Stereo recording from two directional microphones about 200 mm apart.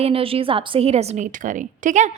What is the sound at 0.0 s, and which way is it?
A woman's voice, 30° right (ahead or behind).